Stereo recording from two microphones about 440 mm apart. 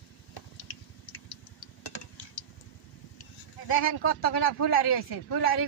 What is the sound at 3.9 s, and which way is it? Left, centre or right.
Speech, left.